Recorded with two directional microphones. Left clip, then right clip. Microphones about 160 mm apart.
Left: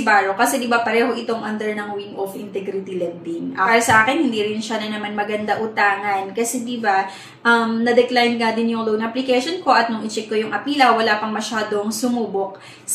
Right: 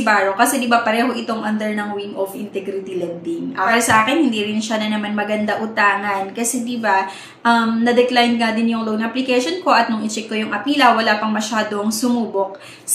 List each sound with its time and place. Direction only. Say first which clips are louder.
0.0 s a woman's voice: right 1 dB; 25° right (ahead or behind)
3.6 s a woman's voice: even; 30° right (ahead or behind)